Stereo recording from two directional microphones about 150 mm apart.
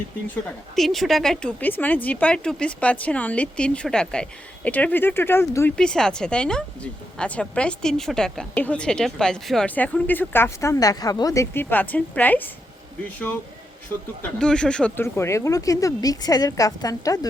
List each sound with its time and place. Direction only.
0.8 s a woman's voice: centre (ahead or behind)
5.7 s a woman's voice: 5° left (ahead or behind)
14.2 s a woman's voice: 5° left (ahead or behind)
15.0 s a woman's voice: 15° left (ahead or behind)